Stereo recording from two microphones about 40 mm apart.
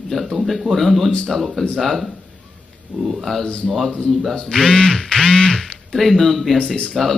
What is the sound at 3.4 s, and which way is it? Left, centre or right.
Speech, left.